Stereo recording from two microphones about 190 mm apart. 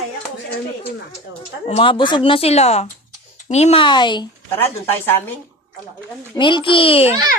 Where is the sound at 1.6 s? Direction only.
30° left (ahead or behind).